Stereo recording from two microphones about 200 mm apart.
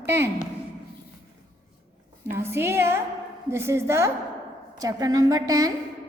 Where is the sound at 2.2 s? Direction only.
10° right (ahead or behind).